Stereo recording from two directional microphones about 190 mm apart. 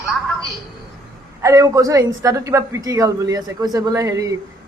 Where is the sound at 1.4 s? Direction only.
15° right (ahead or behind).